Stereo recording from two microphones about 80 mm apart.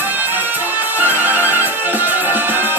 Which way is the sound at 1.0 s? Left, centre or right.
Right.